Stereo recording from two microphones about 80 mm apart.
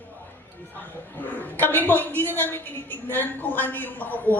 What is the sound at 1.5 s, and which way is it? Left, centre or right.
A woman's voice, left.